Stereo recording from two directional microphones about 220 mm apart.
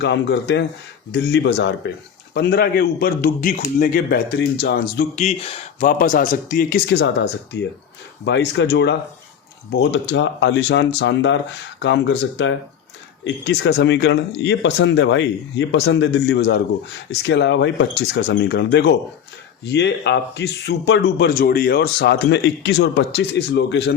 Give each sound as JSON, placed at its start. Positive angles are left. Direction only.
{"t": 0.0, "sound": "speech", "side_deg": 50}
{"t": 5.1, "sound": "speech", "side_deg": 30}